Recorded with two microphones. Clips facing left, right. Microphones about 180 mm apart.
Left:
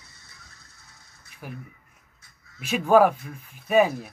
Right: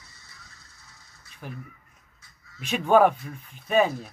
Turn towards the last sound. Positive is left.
turn(degrees=5)  # may be behind; listen again after turning